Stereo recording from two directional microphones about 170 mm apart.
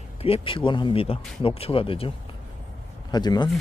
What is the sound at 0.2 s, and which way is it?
Speech, 35° left (ahead or behind).